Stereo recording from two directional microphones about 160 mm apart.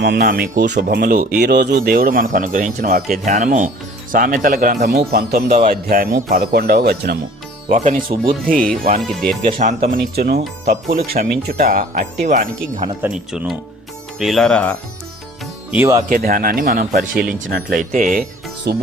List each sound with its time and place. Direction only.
0.0 s speech: 90° right; by 1.3 s 60° right (ahead or behind)
1.4 s speech: 90° right; by 4.9 s 50° right (ahead or behind)
4.9 s speech: 80° right
7.7 s speech: 50° right (ahead or behind)
8.3 s speech: 60° right (ahead or behind)
9.0 s speech: 5° left (ahead or behind)
9.6 s speech: 55° right (ahead or behind)
13.0 s speech: 5° right (ahead or behind)
15.7 s speech: 15° right (ahead or behind)
16.0 s speech: 60° right (ahead or behind)
18.7 s music: 80° right